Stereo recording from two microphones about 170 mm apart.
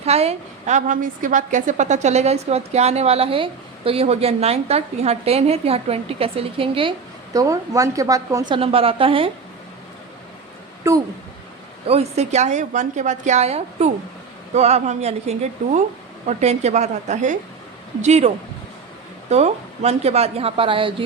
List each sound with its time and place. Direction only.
0.0 s a woman's voice: 40° right (ahead or behind)
7.3 s a woman's voice: 20° right (ahead or behind)
8.5 s a woman's voice: 35° right (ahead or behind)
10.8 s speech: 15° right (ahead or behind)
11.9 s a woman's voice: 40° right (ahead or behind)
19.3 s a woman's voice: 40° right (ahead or behind)